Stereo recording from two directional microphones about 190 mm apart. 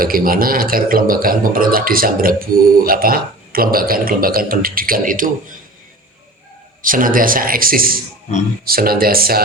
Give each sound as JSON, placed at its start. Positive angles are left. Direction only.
{"t": 0.0, "sound": "a man's voice", "side_deg": -50}
{"t": 6.8, "sound": "a man's voice", "side_deg": -45}